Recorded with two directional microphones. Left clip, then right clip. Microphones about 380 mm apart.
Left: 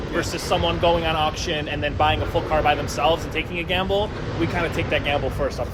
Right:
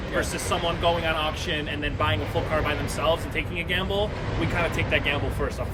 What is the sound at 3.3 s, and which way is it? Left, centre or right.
Speech, centre.